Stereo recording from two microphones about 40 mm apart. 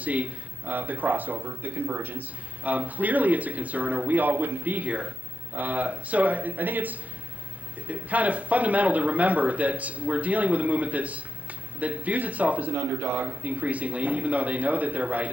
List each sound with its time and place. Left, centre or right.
0.0 s speech: right